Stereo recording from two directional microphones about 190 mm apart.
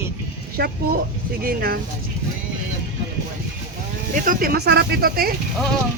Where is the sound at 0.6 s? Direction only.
55° right (ahead or behind).